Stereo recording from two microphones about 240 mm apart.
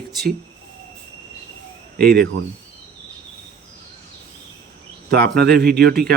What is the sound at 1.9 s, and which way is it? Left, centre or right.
Speech, right.